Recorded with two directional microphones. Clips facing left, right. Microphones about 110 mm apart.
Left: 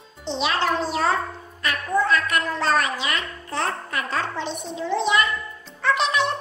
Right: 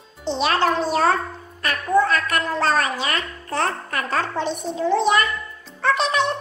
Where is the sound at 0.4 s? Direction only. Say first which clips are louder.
Right 3 dB; 50° right (ahead or behind).